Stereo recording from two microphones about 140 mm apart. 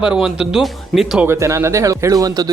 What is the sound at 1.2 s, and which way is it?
Speech, 20° right (ahead or behind).